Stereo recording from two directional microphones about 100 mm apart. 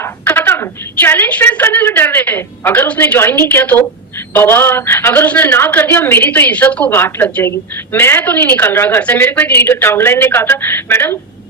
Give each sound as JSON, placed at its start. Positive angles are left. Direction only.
{"t": 0.0, "sound": "a woman's voice", "side_deg": 25}
{"t": 7.0, "sound": "a woman's voice", "side_deg": 25}